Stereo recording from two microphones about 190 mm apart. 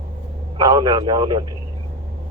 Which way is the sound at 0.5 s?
20° right (ahead or behind).